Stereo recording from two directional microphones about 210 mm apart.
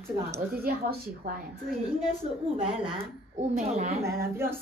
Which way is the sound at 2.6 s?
25° right (ahead or behind).